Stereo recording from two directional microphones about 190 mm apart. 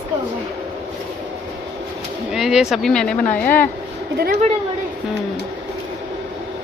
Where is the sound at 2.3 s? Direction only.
Centre (ahead or behind).